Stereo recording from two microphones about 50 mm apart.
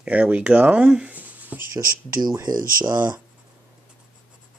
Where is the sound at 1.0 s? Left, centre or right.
Right.